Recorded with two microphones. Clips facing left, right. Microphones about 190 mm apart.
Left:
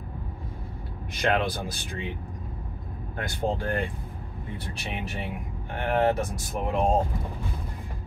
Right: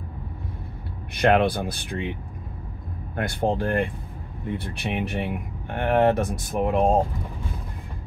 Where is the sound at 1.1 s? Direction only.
60° right (ahead or behind).